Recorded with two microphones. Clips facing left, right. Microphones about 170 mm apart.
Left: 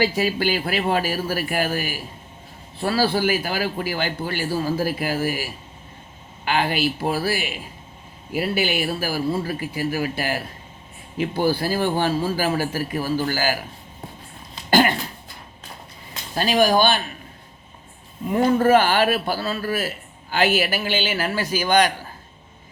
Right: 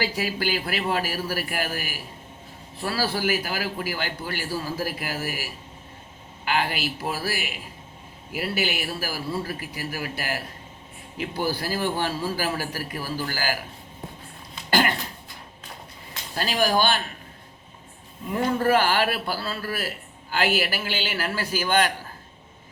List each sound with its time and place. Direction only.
0.0 s a man's voice: 25° left (ahead or behind)
14.7 s a sound: 20° left (ahead or behind)
16.3 s a man's voice: 20° left (ahead or behind)
18.3 s a man's voice: 20° left (ahead or behind)